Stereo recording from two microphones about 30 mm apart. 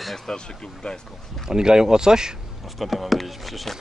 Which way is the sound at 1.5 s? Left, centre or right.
Right.